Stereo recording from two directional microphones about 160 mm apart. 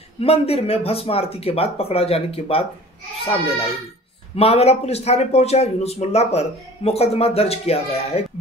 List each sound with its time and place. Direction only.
0.2 s speech: 40° left (ahead or behind)
4.4 s speech: 40° left (ahead or behind)